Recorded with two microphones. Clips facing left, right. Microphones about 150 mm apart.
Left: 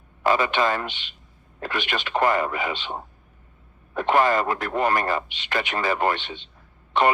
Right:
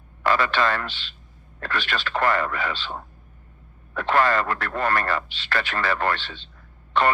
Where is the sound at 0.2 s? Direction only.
20° left (ahead or behind).